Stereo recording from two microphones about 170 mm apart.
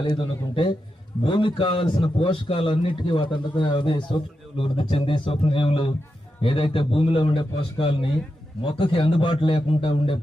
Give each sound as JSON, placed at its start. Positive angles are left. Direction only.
{"t": 0.0, "sound": "a man's voice", "side_deg": 30}